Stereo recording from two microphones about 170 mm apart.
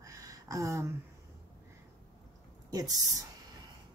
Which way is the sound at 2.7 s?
20° right (ahead or behind).